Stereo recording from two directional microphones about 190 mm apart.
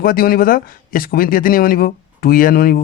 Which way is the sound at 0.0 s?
50° left (ahead or behind).